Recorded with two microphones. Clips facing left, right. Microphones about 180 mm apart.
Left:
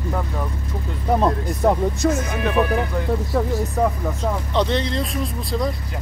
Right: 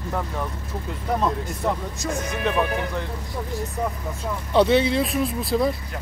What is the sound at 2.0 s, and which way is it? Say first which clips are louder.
Speech: left 7 dB; 60° left (ahead or behind).